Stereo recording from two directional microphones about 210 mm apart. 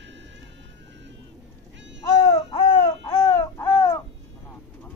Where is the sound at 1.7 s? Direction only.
60° right (ahead or behind).